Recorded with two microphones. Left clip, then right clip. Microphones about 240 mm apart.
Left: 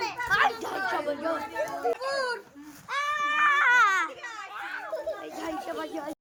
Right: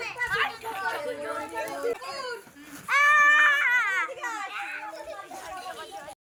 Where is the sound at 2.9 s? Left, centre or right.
Centre.